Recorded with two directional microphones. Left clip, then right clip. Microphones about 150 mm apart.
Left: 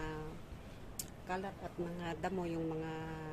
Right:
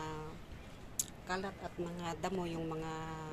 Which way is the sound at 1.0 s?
10° left (ahead or behind).